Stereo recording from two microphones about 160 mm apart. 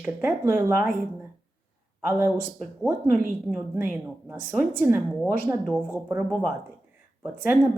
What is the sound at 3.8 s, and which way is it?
Speech, 10° right (ahead or behind).